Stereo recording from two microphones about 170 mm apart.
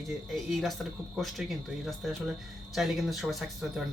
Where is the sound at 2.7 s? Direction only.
Centre (ahead or behind).